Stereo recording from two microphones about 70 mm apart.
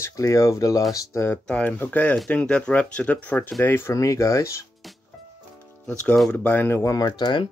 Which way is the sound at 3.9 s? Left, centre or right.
Left.